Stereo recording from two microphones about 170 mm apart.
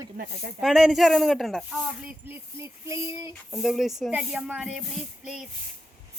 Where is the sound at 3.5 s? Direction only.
Centre (ahead or behind).